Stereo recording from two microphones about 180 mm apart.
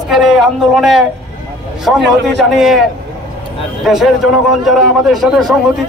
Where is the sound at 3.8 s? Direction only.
Centre (ahead or behind).